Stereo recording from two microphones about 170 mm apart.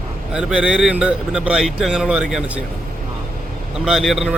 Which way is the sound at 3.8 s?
Centre (ahead or behind).